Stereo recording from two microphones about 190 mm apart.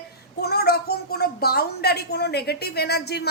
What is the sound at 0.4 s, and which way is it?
A woman's voice, 55° left (ahead or behind).